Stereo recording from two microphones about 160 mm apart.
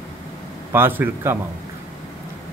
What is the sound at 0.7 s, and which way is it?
Speech, 15° right (ahead or behind).